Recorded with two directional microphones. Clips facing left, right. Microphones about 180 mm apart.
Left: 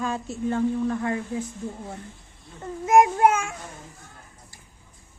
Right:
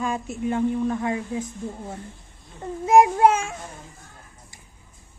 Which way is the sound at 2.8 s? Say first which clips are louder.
Right 2 dB; 30° right (ahead or behind).